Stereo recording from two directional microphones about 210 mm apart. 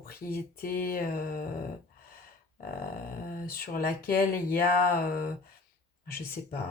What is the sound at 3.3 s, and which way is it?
Speech, 45° left (ahead or behind).